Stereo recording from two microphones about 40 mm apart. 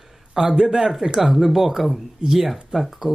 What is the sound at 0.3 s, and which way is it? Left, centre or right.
Speech, centre.